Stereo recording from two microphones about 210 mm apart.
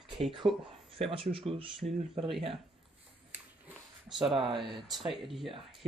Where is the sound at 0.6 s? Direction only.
25° right (ahead or behind).